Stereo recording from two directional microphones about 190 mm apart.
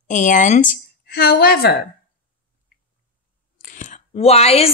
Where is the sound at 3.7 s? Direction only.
40° left (ahead or behind).